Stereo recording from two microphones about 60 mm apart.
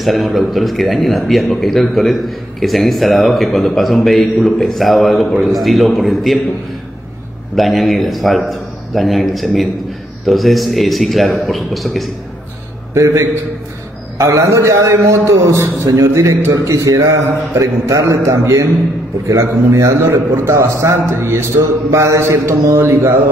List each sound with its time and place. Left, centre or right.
0.0 s a man's voice: centre
7.5 s a man's voice: centre
12.9 s a man's voice: right